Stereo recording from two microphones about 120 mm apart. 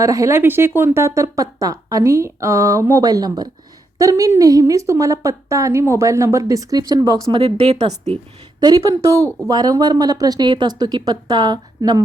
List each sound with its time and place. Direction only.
0.0 s a woman's voice: 25° right (ahead or behind)
7.4 s a woman's voice: 60° right (ahead or behind)
8.6 s speech: 35° right (ahead or behind)
9.0 s speech: 25° right (ahead or behind)